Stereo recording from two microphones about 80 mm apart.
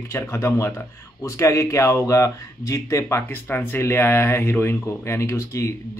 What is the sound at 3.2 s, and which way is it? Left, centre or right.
A man's voice, left.